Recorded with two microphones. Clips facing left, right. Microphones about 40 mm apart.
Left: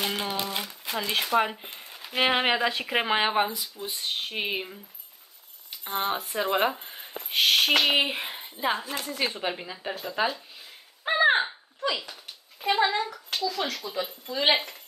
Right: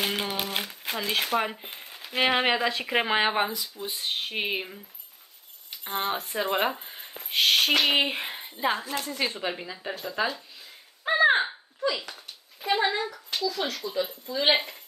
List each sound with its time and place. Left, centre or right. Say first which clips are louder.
0.0 s crumpling: even; centre
0.9 s speech: left 2 dB; centre
12.7 s speech: even; centre
13.8 s speech: right 2 dB; left
14.2 s speech: left 2 dB; left
14.5 s speech: right 1 dB; centre